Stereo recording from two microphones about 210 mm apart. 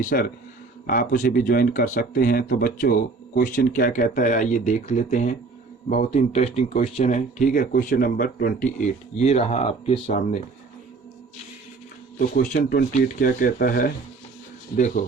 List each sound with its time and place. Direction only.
0.0 s speech: 40° left (ahead or behind)
12.3 s speech: 45° left (ahead or behind)